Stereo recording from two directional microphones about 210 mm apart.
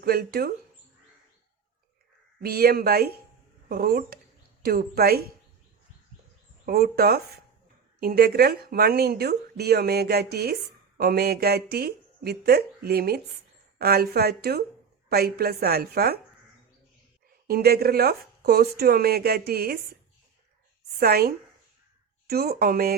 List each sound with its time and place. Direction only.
0.0 s a woman's voice: 45° right (ahead or behind)
2.4 s a woman's voice: 45° right (ahead or behind)
6.7 s a woman's voice: 45° right (ahead or behind)
17.5 s a woman's voice: 45° right (ahead or behind)
21.0 s a woman's voice: 45° right (ahead or behind)